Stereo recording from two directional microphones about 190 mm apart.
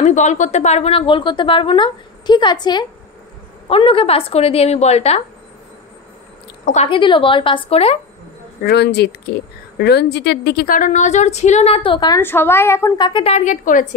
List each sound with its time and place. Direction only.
0.0 s a woman's voice: 40° left (ahead or behind)
6.6 s a woman's voice: 35° left (ahead or behind)
8.6 s a woman's voice: 60° left (ahead or behind); by 12.2 s 25° left (ahead or behind)
12.2 s a woman's voice: 10° left (ahead or behind); by 13.8 s 45° left (ahead or behind)